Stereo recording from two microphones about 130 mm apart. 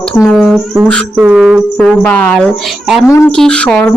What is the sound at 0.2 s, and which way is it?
A woman's voice, 5° left (ahead or behind).